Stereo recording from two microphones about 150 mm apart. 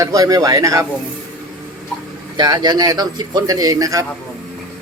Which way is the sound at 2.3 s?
25° right (ahead or behind).